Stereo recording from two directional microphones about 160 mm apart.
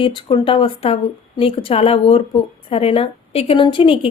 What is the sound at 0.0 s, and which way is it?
A woman's voice, 35° left (ahead or behind).